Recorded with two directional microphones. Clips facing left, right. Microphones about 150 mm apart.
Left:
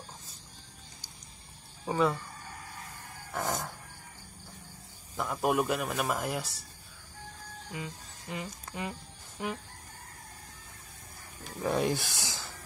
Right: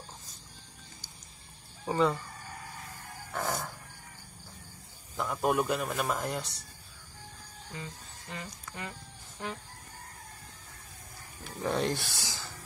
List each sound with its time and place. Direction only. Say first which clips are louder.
1.9 s a man's voice: right 1 dB; centre (ahead or behind)
3.3 s a sound: even; 20° left (ahead or behind)
5.1 s a man's voice: even; 5° left (ahead or behind)
7.7 s speech: left 2 dB; 15° left (ahead or behind)
11.6 s speech: left 1 dB; 10° left (ahead or behind)